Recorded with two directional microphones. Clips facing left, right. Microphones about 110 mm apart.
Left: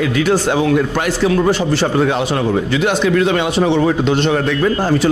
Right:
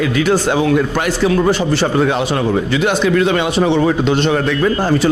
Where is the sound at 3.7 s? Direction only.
30° right (ahead or behind).